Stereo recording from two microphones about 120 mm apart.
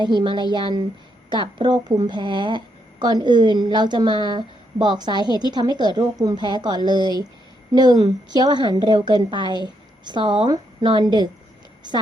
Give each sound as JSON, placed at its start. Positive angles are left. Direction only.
{"t": 0.0, "sound": "a woman's voice", "side_deg": -40}